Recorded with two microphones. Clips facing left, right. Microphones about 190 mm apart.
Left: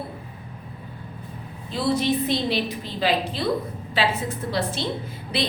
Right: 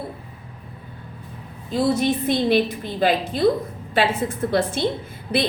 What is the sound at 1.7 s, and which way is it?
A woman's voice, 50° right (ahead or behind).